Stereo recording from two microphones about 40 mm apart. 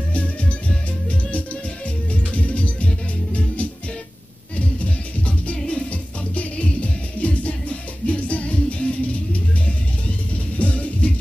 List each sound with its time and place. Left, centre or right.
0.1 s music: left
2.3 s music: left